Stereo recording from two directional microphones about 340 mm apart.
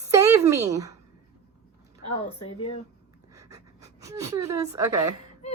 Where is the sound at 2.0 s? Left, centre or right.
Centre.